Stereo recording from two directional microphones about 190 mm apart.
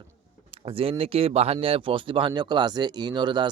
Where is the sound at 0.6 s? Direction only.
30° right (ahead or behind).